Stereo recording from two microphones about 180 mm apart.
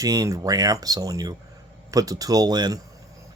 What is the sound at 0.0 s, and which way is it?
Speech, 20° right (ahead or behind).